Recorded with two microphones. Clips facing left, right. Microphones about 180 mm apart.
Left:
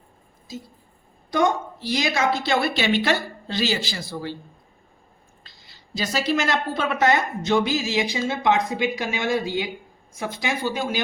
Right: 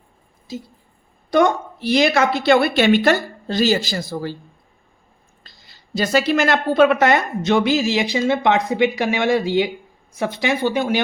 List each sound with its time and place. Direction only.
1.3 s a woman's voice: 65° right (ahead or behind); by 4.4 s 45° right (ahead or behind)
5.4 s a woman's voice: 45° right (ahead or behind); by 11.0 s 65° right (ahead or behind)